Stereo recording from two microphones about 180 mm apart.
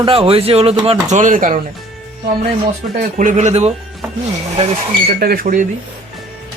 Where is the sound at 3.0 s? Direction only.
45° right (ahead or behind).